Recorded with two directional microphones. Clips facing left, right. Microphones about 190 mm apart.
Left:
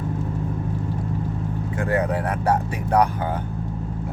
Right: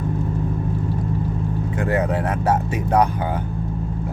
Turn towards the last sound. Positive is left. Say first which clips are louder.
# right 1 dB
turn(degrees=-20)  # may be behind; listen again after turning